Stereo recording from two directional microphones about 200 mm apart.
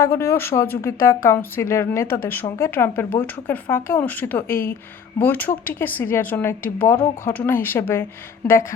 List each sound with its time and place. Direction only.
0.0 s a woman's voice: 15° left (ahead or behind)